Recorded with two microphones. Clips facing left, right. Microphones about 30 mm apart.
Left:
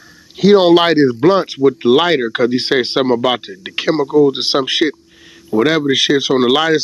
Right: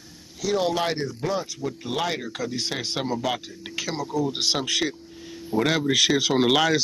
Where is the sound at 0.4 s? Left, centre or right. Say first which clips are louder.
Left 15 dB; left.